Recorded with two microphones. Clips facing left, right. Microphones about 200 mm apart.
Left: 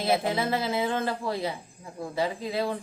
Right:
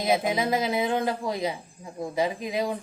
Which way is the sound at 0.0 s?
15° right (ahead or behind).